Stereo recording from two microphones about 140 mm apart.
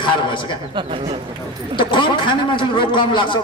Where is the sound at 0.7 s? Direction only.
35° right (ahead or behind).